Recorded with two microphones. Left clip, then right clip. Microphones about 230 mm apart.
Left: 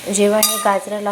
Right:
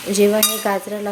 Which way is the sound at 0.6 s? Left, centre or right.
Centre.